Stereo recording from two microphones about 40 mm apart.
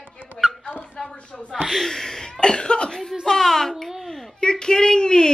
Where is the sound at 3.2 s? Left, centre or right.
Centre.